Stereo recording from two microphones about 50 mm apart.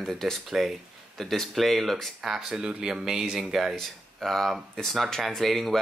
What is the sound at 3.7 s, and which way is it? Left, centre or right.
Speech, centre.